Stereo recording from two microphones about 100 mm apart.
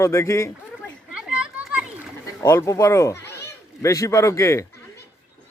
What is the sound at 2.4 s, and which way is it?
A man's voice, 30° left (ahead or behind).